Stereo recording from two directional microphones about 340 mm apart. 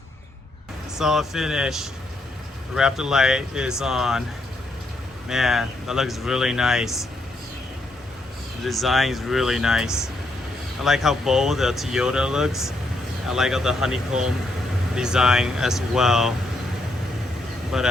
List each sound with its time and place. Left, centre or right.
0.9 s speech: centre
5.3 s speech: centre
8.6 s speech: centre
17.7 s speech: centre